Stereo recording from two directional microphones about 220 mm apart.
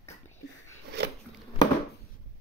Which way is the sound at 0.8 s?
50° right (ahead or behind).